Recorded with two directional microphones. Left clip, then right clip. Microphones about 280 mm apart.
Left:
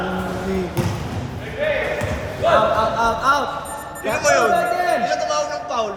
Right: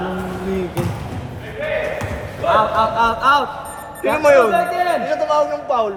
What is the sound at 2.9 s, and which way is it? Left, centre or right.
A man's voice, centre.